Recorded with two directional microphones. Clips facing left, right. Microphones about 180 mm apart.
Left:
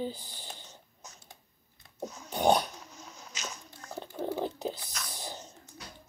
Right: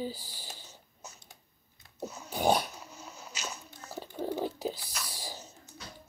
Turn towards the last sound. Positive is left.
turn(degrees=-5)  # may be behind; listen again after turning